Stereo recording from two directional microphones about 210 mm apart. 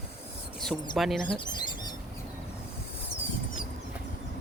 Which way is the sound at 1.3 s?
20° left (ahead or behind).